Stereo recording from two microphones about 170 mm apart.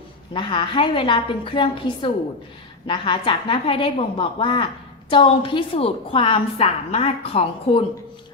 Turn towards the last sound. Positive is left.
turn(degrees=35)  # may be behind; listen again after turning